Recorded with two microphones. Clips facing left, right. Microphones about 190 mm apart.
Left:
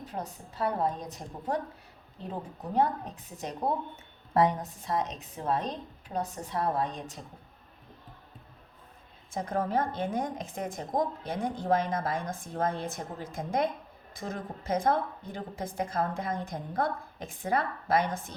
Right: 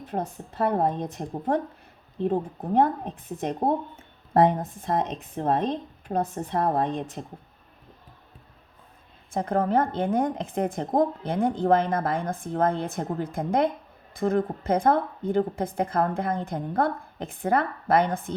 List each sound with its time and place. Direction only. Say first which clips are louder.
0.0 s a woman's voice: right 7 dB; 55° right (ahead or behind)
9.3 s a woman's voice: right 6 dB; 55° right (ahead or behind)